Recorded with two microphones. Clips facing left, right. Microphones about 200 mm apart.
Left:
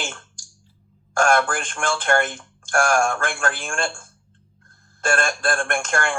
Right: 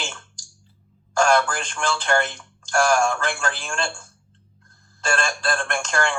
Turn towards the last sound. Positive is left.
turn(degrees=55)  # may be behind; listen again after turning